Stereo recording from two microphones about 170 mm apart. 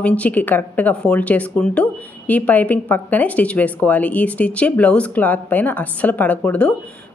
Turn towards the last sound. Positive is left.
turn(degrees=10)  # may be behind; listen again after turning